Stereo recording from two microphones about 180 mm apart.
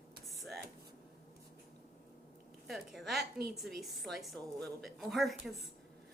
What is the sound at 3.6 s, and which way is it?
A woman's voice, centre (ahead or behind).